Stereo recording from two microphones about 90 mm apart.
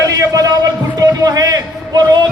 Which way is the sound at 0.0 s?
40° right (ahead or behind).